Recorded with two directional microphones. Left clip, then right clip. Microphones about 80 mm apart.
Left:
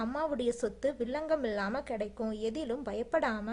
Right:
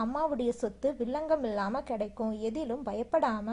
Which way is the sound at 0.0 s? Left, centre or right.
Left.